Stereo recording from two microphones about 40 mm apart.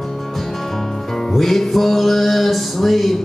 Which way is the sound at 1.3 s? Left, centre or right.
Centre.